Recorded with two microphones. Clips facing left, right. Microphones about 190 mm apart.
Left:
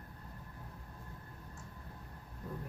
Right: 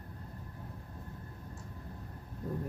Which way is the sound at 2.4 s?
40° right (ahead or behind).